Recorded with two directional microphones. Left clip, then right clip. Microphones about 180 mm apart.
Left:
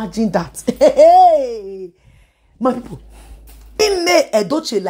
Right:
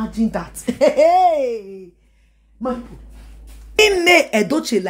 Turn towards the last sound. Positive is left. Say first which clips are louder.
# left 2 dB
turn(degrees=0)  # may be behind; listen again after turning